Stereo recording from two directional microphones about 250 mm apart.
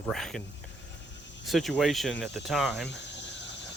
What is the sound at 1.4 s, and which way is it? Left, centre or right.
Speech, centre.